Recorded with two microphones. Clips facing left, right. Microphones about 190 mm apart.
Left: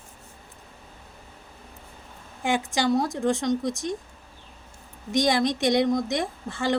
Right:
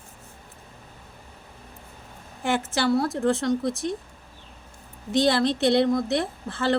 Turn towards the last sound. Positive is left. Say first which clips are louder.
# right 1 dB
turn(degrees=15)  # may be behind; listen again after turning